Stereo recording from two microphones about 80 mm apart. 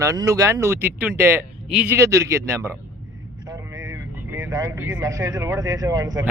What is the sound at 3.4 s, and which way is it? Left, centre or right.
Vehicle, right.